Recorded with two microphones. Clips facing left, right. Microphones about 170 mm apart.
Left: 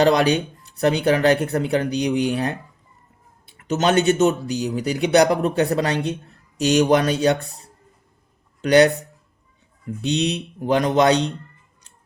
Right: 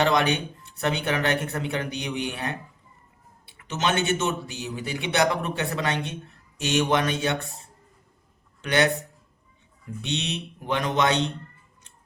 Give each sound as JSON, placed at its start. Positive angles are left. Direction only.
{"t": 0.0, "sound": "speech", "side_deg": 35}
{"t": 3.6, "sound": "speech", "side_deg": 40}
{"t": 10.0, "sound": "speech", "side_deg": 35}